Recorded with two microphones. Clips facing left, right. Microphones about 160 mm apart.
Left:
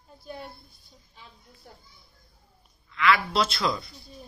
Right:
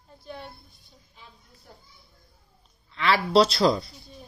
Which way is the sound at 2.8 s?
30° right (ahead or behind).